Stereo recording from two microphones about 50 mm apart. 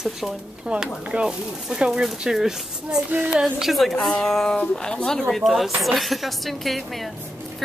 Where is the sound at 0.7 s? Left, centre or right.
Right.